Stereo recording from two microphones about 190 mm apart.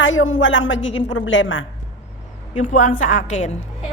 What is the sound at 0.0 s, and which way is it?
A woman's voice, 90° left.